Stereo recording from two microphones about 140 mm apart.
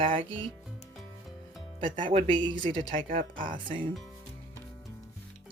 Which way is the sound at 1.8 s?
40° right (ahead or behind).